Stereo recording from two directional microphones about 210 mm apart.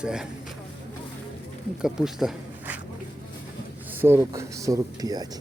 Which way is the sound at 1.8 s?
Centre (ahead or behind).